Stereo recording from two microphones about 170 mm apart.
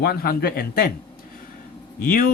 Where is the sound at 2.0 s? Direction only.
55° left (ahead or behind).